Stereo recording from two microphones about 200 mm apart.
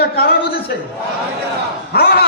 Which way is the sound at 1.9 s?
50° left (ahead or behind).